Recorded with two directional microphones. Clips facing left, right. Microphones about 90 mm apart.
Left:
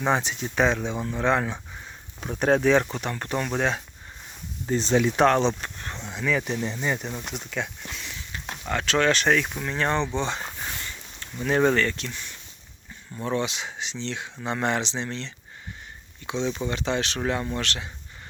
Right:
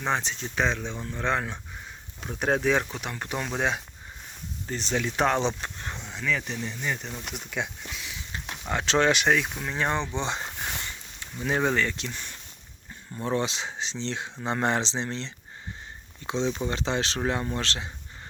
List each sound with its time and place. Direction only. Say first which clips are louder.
0.0 s speech: left 4 dB; 5° left (ahead or behind); by 3.5 s 10° right (ahead or behind)
4.6 s speech: left 7 dB; 20° left (ahead or behind)
5.2 s speech: left 1 dB; 10° right (ahead or behind)
6.1 s speech: left 4 dB; 10° left (ahead or behind)
6.6 s speech: left 4 dB; 30° left (ahead or behind)
7.3 s speech: left 1 dB; 10° right (ahead or behind)
8.6 s speech: left 1 dB; 20° right (ahead or behind)
9.1 s speech: left 1 dB; 5° right (ahead or behind)
11.4 s speech: left 4 dB; 10° right (ahead or behind)
12.1 s speech: even; 40° right (ahead or behind)